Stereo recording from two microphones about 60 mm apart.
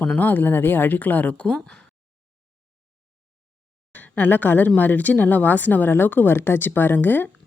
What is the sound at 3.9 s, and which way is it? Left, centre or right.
Speech, left.